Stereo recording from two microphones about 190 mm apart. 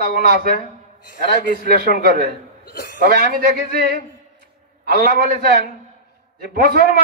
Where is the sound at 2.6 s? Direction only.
55° left (ahead or behind).